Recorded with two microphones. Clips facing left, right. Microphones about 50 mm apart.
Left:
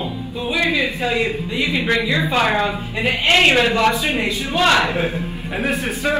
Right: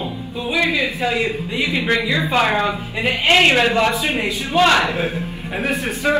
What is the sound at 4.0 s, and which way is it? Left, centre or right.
Speech, right.